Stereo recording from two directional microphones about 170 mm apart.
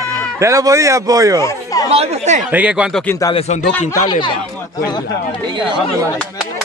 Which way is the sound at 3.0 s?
20° left (ahead or behind).